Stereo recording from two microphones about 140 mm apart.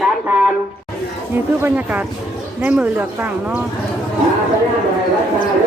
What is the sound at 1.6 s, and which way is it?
Speech, 15° right (ahead or behind).